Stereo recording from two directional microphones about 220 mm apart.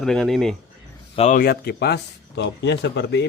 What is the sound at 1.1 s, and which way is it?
Speech, 30° left (ahead or behind).